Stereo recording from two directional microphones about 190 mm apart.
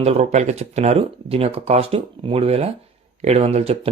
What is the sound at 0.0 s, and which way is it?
Speech, 35° right (ahead or behind).